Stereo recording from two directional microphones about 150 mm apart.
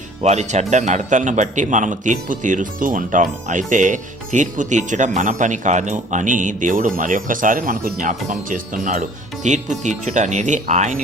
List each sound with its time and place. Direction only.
0.2 s speech: 50° right (ahead or behind)